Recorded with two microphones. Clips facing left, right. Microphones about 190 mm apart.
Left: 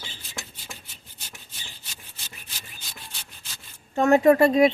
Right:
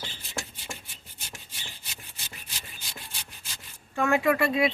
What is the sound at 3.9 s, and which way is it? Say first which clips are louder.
Speech: left 7 dB; 40° left (ahead or behind).